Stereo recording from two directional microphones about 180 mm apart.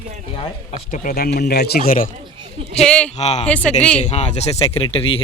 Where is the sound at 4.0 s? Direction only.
40° left (ahead or behind).